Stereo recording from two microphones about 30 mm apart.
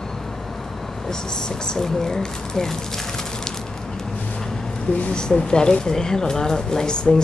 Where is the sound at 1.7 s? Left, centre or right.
Centre.